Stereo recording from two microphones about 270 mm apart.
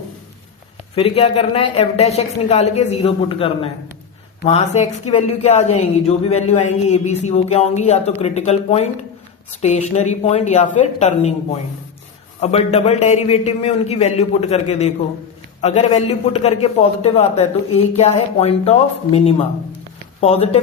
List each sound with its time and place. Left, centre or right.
0.9 s speech: left
12.4 s speech: left
15.6 s speech: left